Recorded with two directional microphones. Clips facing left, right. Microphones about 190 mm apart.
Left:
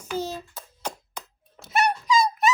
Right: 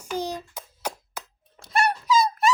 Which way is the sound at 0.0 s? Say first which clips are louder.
Even; 15° right (ahead or behind).